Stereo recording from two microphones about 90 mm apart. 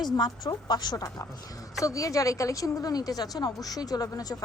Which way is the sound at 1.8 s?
40° left (ahead or behind).